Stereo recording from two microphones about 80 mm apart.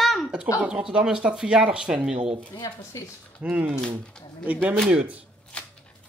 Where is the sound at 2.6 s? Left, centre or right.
Left.